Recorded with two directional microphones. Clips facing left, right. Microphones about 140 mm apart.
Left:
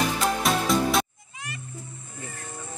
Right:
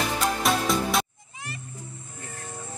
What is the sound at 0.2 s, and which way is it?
Music, centre (ahead or behind).